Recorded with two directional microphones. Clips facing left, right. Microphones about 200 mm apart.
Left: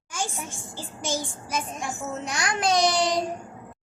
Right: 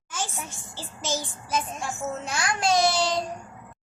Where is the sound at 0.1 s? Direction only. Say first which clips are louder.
Left 2 dB; 15° left (ahead or behind).